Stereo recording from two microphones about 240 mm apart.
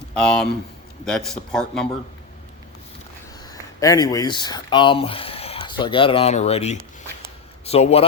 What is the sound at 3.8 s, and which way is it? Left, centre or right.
Speech, centre.